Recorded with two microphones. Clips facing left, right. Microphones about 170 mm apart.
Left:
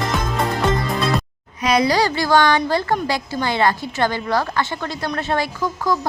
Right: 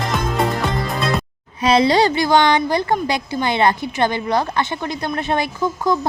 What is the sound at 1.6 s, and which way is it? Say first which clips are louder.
A woman's voice: right 3 dB; 30° right (ahead or behind).